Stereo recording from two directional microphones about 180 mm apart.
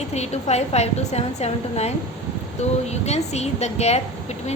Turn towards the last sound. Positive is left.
turn(degrees=35)  # may be behind; listen again after turning